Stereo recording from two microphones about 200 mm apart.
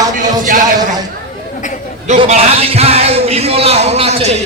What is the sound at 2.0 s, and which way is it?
A man's voice, 35° right (ahead or behind).